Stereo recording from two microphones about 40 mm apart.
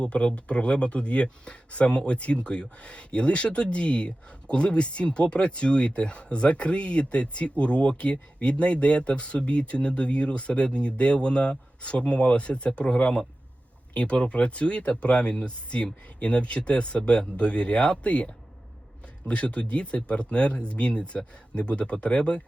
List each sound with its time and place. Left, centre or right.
0.0 s speech: left